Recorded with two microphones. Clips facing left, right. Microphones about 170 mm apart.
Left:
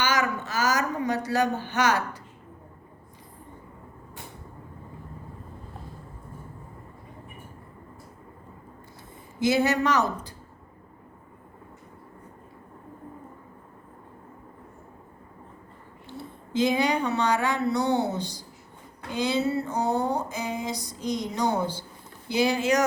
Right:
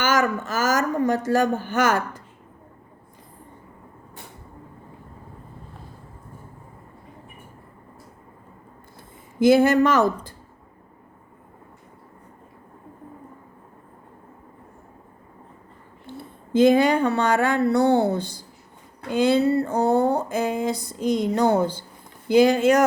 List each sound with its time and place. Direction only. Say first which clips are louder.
0.0 s a woman's voice: right 4 dB; 50° right (ahead or behind)
9.4 s speech: right 7 dB; 50° right (ahead or behind)
16.0 s speech: right 1 dB; 55° right (ahead or behind)
19.1 s a sound: right 7 dB; 55° right (ahead or behind)
22.3 s speech: right 7 dB; 50° right (ahead or behind)